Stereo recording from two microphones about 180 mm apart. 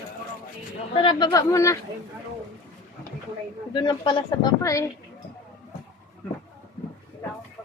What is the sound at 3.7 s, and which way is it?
Speech, 25° left (ahead or behind).